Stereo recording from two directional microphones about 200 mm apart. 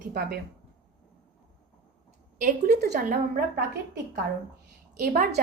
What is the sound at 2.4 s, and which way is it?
Speech, 50° right (ahead or behind).